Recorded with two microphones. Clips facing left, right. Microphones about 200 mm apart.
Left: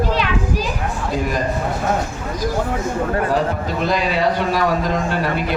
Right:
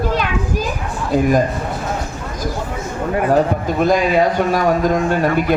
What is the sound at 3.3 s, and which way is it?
A man's voice, 50° right (ahead or behind).